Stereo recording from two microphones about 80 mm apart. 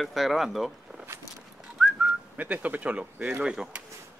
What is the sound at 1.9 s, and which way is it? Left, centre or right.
Speech, centre.